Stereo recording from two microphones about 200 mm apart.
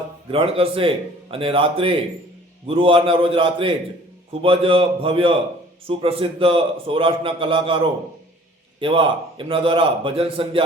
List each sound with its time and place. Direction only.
0.3 s a man's voice: 25° right (ahead or behind)
8.8 s a man's voice: 25° right (ahead or behind)